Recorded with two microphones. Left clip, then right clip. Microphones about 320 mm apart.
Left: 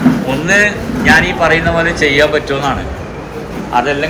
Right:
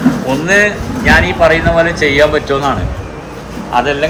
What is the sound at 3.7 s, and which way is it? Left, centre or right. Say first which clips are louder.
Speech: right 1 dB; right.